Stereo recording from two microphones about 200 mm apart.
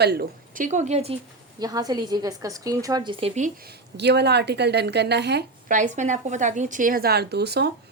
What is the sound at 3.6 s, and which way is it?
A woman's voice, 55° right (ahead or behind).